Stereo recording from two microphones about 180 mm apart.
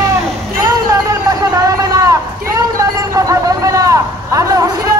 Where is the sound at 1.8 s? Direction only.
20° right (ahead or behind).